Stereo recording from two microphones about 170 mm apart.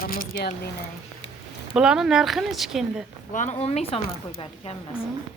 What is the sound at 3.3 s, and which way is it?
Speech, 45° left (ahead or behind).